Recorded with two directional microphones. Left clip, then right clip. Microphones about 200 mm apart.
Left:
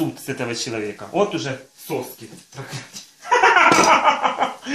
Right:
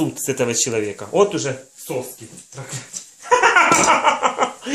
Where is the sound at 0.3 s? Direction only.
50° right (ahead or behind).